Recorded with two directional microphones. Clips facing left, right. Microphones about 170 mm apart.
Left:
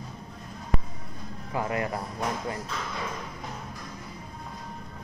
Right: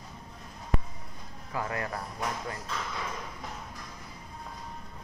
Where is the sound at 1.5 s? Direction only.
20° left (ahead or behind).